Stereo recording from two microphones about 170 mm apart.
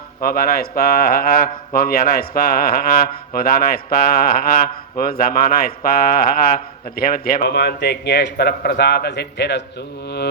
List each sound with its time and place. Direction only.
0.2 s a man's voice: 60° left (ahead or behind); by 9.6 s 80° left